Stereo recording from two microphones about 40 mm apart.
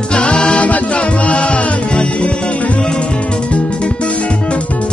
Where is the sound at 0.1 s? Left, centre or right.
Left.